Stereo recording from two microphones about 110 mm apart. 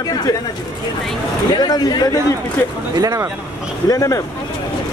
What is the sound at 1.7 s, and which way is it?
Speech, 35° left (ahead or behind).